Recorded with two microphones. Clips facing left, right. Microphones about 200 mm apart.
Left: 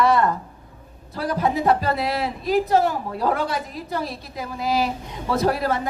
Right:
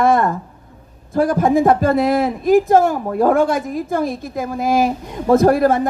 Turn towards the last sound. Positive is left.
turn(degrees=-50)  # may be behind; listen again after turning